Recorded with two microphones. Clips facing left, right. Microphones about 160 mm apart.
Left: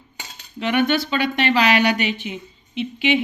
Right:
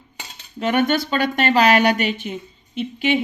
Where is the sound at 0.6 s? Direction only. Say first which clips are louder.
Right 1 dB; 45° right (ahead or behind).